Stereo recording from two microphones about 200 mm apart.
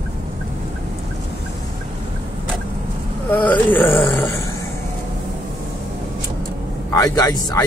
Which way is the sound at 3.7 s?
10° left (ahead or behind).